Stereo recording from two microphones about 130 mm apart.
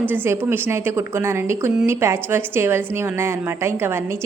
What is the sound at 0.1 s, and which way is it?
A woman's voice, 15° right (ahead or behind).